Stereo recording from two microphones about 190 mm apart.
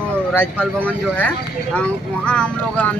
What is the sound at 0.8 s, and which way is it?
Speech, 10° left (ahead or behind).